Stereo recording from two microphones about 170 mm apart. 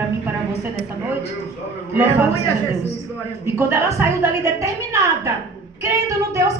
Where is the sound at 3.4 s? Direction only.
15° right (ahead or behind).